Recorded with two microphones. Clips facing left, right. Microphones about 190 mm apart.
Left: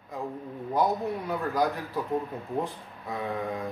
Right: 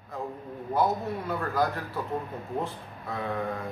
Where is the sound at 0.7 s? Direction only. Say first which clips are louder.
Even; 15° left (ahead or behind).